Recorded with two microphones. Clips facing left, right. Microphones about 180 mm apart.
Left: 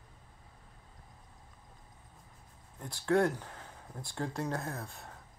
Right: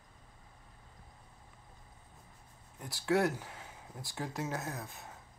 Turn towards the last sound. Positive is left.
turn(degrees=0)  # may be behind; listen again after turning